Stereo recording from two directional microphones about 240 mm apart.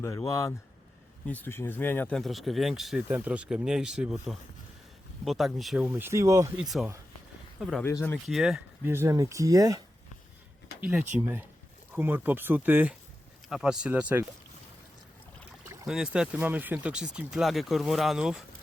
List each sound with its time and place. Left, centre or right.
0.0 s speech: centre
6.6 s speech: centre
15.9 s speech: centre